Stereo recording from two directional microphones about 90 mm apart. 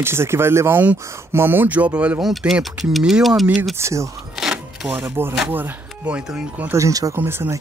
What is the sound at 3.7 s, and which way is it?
Speech, 35° right (ahead or behind).